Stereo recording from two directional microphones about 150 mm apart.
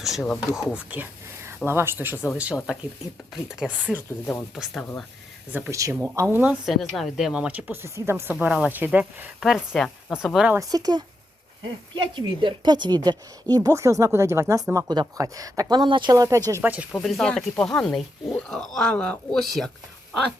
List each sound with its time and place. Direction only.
0.0 s speech: centre (ahead or behind)
3.9 s speech: 15° left (ahead or behind)
4.5 s speech: centre (ahead or behind)
5.5 s speech: 10° right (ahead or behind)
6.7 s speech: centre (ahead or behind)
9.4 s speech: centre (ahead or behind)
10.5 s a woman's voice: 25° right (ahead or behind)
16.9 s speech: 5° left (ahead or behind)